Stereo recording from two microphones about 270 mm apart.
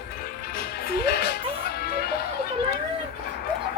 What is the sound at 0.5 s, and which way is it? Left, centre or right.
Music, left.